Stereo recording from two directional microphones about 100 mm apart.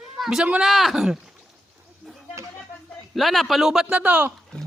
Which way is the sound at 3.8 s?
15° right (ahead or behind).